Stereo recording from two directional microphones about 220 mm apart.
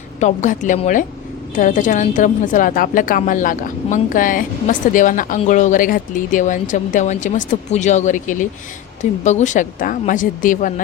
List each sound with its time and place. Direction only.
0.2 s speech: 35° left (ahead or behind)